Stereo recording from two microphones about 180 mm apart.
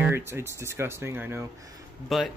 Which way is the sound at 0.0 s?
15° right (ahead or behind).